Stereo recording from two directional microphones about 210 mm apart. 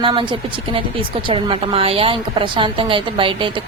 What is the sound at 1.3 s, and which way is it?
Speech, 25° right (ahead or behind).